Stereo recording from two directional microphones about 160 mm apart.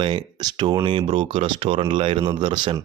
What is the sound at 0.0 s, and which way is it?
Speech, 30° right (ahead or behind).